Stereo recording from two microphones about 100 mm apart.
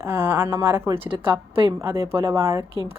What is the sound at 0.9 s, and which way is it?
Speech, 60° right (ahead or behind).